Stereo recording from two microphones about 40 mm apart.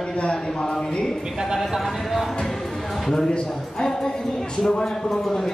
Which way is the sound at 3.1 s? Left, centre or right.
Centre.